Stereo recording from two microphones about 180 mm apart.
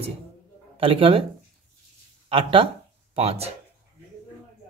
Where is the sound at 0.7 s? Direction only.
30° right (ahead or behind).